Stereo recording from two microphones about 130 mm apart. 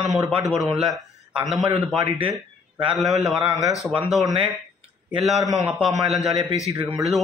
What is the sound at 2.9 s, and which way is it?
Speech, centre (ahead or behind).